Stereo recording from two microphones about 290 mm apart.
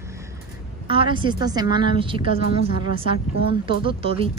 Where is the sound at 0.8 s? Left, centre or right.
Centre.